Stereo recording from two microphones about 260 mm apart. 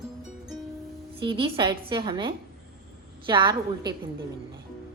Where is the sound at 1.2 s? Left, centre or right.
Centre.